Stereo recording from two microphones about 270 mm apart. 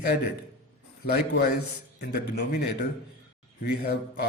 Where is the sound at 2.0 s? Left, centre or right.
Left.